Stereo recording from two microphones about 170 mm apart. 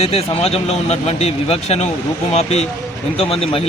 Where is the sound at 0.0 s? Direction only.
35° left (ahead or behind).